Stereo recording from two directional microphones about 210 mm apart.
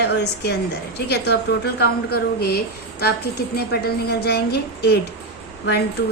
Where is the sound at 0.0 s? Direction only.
55° left (ahead or behind).